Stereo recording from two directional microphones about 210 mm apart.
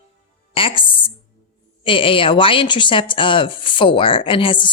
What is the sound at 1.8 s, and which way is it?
Speech, 25° left (ahead or behind).